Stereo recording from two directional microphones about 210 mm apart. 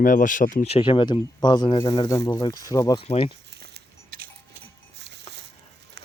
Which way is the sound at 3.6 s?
50° right (ahead or behind).